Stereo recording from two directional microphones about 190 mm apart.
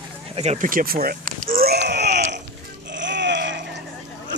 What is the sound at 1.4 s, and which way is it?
Wheeze, 50° right (ahead or behind).